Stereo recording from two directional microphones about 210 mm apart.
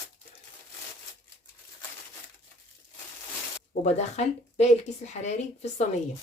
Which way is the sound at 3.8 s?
30° left (ahead or behind).